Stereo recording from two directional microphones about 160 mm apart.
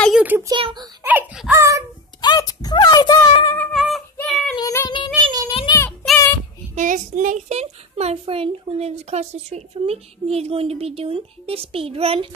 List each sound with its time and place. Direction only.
0.2 s a child's voice: 10° right (ahead or behind)
0.5 s a child's voice: 30° right (ahead or behind)
1.0 s dog: 10° right (ahead or behind)
1.5 s a sound: 20° right (ahead or behind)
2.2 s a sound: 25° left (ahead or behind)
3.7 s child singing: centre (ahead or behind)
4.6 s child singing: 20° left (ahead or behind)
5.2 s child singing: 25° right (ahead or behind)
5.5 s child singing: 35° left (ahead or behind)
6.7 s a child's voice: 50° right (ahead or behind)